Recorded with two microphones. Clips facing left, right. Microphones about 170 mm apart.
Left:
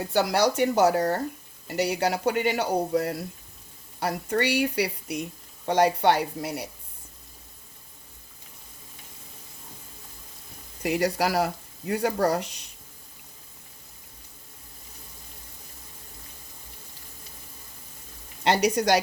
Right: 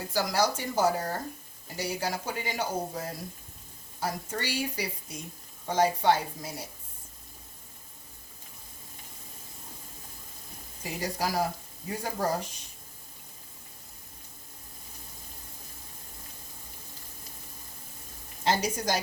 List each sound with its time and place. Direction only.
0.1 s speech: 65° left (ahead or behind)
10.8 s speech: 70° left (ahead or behind)
18.4 s speech: 70° left (ahead or behind)